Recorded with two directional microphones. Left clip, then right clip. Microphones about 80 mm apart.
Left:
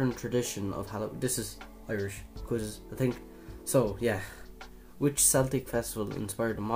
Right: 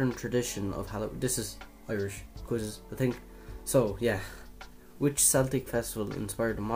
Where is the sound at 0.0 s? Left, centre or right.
Centre.